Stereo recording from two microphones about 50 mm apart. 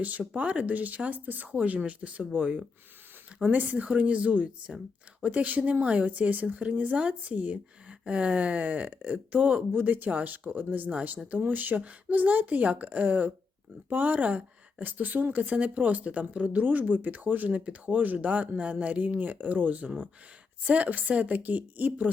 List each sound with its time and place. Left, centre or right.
0.0 s a woman's voice: right